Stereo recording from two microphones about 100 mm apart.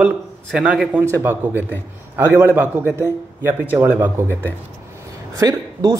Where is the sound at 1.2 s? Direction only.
20° right (ahead or behind).